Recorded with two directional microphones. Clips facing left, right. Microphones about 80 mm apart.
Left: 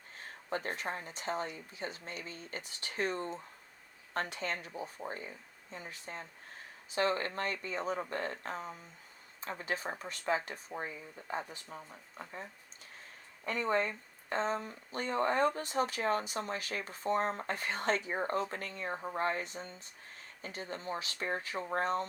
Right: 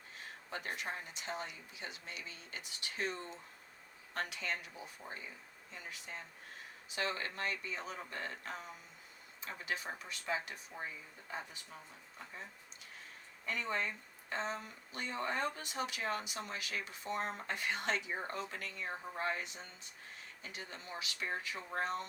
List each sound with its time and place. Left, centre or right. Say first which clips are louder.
0.2 s speech: left 7 dB; left